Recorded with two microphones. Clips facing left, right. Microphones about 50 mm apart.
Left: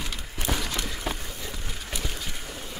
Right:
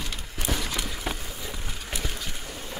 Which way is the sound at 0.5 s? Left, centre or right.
Centre.